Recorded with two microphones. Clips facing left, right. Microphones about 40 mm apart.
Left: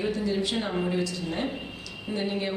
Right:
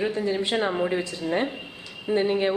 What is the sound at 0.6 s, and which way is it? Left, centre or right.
Speech, centre.